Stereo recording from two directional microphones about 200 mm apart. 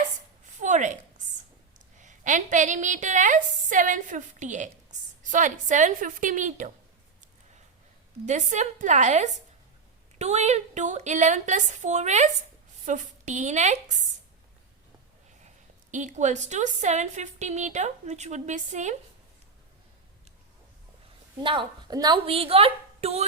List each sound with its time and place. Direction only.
0.6 s a sound: 35° right (ahead or behind)
2.0 s a woman's voice: 40° right (ahead or behind)
8.3 s a woman's voice: 35° right (ahead or behind)
15.4 s a woman's voice: 35° right (ahead or behind)
21.4 s a woman's voice: 25° right (ahead or behind)